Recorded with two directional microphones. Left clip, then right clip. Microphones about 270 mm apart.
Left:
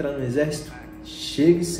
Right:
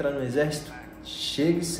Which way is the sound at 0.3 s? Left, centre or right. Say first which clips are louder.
Left 2 dB; centre.